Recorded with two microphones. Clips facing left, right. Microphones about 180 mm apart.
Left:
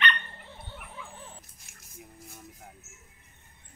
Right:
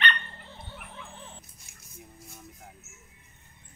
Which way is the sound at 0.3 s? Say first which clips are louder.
Even; 15° left (ahead or behind).